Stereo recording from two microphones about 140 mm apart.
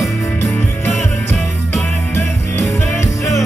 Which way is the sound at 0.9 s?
Centre (ahead or behind).